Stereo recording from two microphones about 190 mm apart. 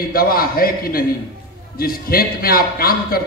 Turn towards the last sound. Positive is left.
turn(degrees=50)  # may be behind; listen again after turning